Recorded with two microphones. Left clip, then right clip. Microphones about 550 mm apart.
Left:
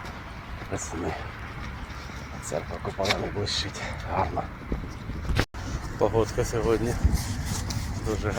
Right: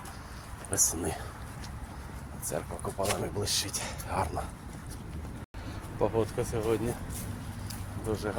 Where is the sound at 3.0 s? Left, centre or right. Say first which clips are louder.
Left 5 dB; right.